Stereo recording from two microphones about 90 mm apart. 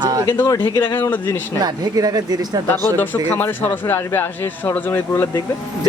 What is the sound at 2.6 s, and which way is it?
Speech, 20° left (ahead or behind).